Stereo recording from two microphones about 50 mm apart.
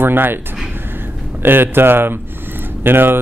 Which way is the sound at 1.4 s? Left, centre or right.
Right.